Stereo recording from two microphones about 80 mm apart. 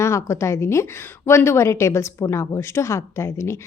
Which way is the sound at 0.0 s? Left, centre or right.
Left.